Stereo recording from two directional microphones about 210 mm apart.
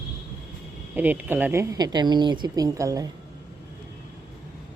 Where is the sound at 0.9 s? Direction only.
10° right (ahead or behind).